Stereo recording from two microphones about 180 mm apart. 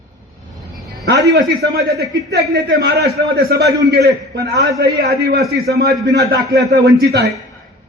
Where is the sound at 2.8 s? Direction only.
75° right (ahead or behind).